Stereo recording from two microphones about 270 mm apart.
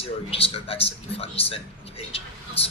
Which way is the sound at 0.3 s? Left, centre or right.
Left.